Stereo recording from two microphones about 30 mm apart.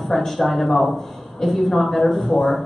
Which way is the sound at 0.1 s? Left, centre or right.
Centre.